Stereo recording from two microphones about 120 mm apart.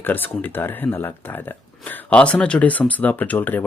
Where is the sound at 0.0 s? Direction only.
15° left (ahead or behind).